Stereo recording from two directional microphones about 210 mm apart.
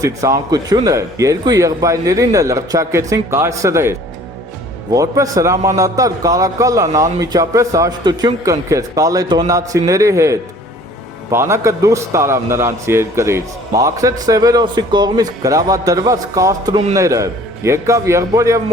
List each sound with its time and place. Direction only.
0.0 s a man's voice: 15° right (ahead or behind)